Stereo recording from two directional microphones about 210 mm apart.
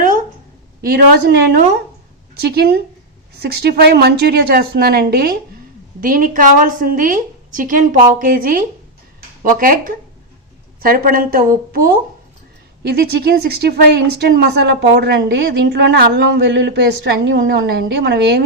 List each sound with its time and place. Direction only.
0.8 s a woman's voice: 50° right (ahead or behind)